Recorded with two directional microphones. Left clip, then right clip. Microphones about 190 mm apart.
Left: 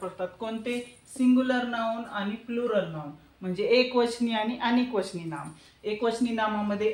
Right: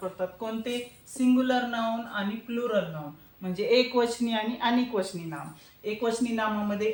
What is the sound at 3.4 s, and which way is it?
Speech, 10° left (ahead or behind).